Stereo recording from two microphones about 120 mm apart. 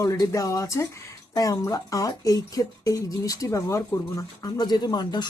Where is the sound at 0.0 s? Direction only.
25° left (ahead or behind).